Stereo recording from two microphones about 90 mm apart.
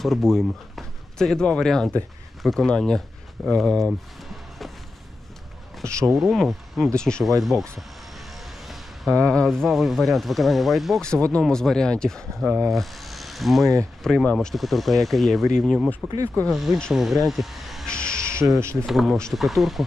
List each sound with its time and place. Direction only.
0.0 s speech: 5° left (ahead or behind)
5.8 s speech: 35° right (ahead or behind)
6.1 s speech: 5° right (ahead or behind)
8.6 s a sound: centre (ahead or behind)
9.1 s speech: 10° left (ahead or behind)
11.0 s speech: 10° left (ahead or behind)
12.7 s mechanisms: centre (ahead or behind)
14.0 s speech: 5° left (ahead or behind)
17.2 s vehicle: centre (ahead or behind)
17.9 s music: 10° left (ahead or behind)
18.9 s speech: centre (ahead or behind)